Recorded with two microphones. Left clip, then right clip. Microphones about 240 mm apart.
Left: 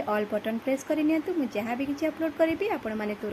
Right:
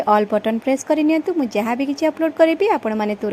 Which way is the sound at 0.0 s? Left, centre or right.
Right.